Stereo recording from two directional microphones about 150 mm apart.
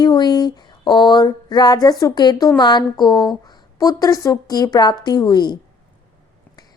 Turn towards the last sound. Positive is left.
turn(degrees=30)  # may be behind; listen again after turning